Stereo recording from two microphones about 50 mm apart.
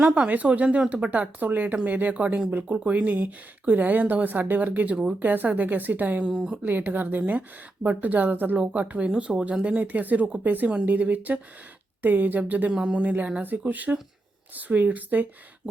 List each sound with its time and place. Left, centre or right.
0.0 s speech: centre
0.3 s speech: right
2.5 s speech: right
2.7 s speech: right
6.3 s speech: centre
6.6 s speech: right
8.5 s speech: right
12.7 s speech: centre
13.0 s speech: right